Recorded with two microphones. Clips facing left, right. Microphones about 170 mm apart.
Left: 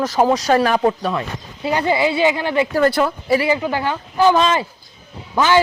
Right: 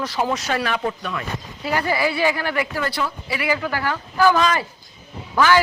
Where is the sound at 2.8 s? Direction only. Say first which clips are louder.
Left 9 dB; 50° left (ahead or behind).